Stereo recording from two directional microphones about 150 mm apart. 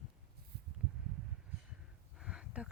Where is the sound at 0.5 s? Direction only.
90° right.